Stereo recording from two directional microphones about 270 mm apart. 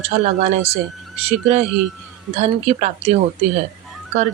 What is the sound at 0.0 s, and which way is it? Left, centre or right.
A woman's voice, right.